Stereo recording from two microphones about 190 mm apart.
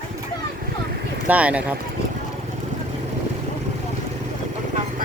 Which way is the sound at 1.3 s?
5° right (ahead or behind).